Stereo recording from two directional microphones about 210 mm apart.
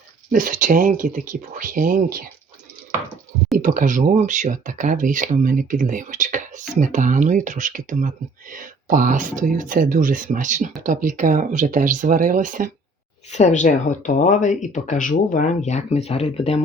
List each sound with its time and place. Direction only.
0.3 s speech: 40° right (ahead or behind)
3.6 s speech: 40° right (ahead or behind)
13.3 s speech: 35° left (ahead or behind)